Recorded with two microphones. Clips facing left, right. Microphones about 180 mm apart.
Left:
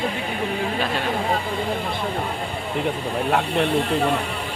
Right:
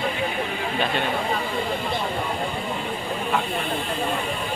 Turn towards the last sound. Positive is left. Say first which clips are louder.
# left 7 dB
turn(degrees=70)  # may be behind; listen again after turning